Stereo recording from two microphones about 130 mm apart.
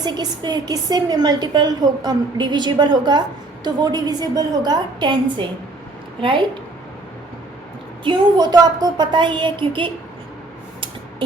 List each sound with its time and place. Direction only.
0.0 s a woman's voice: 35° right (ahead or behind)
8.0 s a woman's voice: 35° right (ahead or behind)